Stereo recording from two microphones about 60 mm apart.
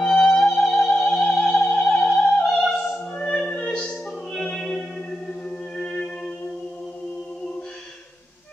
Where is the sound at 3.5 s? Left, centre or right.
Centre.